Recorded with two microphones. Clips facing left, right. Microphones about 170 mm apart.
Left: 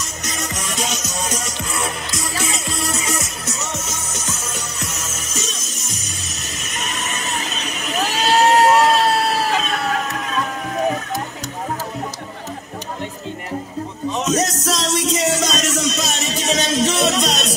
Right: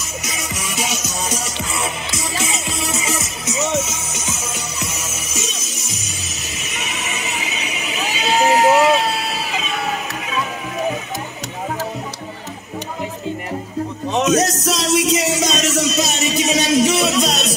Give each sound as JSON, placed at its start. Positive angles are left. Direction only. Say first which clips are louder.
{"t": 0.2, "sound": "music", "louder": "left 3 dB", "side_deg": -5}
{"t": 6.7, "sound": "crowd", "louder": "left 1 dB", "side_deg": -5}
{"t": 14.1, "sound": "music", "louder": "right 5 dB", "side_deg": -65}
{"t": 14.4, "sound": "music", "louder": "right 2 dB", "side_deg": -10}